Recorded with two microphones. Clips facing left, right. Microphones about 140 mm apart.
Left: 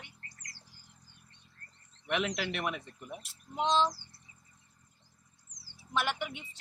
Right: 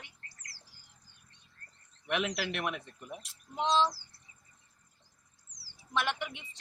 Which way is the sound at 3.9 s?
25° left (ahead or behind).